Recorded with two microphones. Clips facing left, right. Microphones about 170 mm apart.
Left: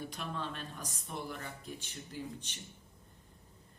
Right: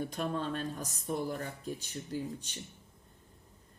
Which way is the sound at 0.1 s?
45° right (ahead or behind).